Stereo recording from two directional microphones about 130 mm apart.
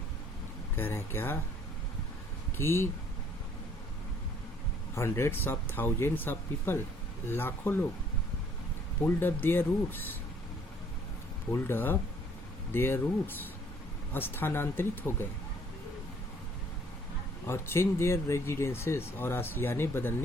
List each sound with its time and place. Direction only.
0.8 s speech: 15° left (ahead or behind)
2.6 s speech: 20° left (ahead or behind)
4.9 s speech: 20° left (ahead or behind)
9.0 s speech: 15° left (ahead or behind)
11.5 s speech: 15° left (ahead or behind)
17.4 s speech: 20° left (ahead or behind)